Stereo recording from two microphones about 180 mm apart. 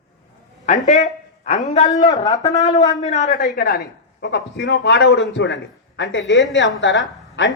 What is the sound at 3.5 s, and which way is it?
A man's voice, 55° left (ahead or behind).